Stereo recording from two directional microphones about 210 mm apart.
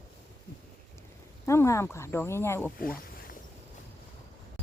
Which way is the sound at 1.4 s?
15° left (ahead or behind).